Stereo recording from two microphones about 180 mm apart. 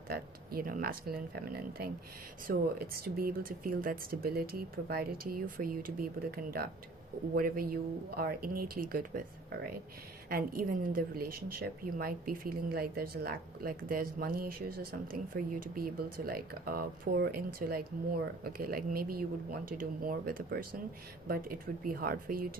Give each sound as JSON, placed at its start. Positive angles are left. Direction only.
{"t": 0.1, "sound": "a woman's voice", "side_deg": -55}